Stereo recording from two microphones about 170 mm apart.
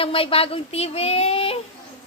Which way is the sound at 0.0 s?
35° left (ahead or behind).